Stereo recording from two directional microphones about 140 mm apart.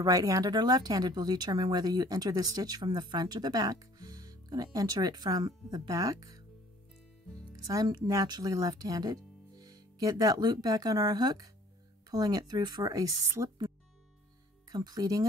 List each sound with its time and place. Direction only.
0.0 s speech: 25° right (ahead or behind)
7.5 s speech: 25° right (ahead or behind)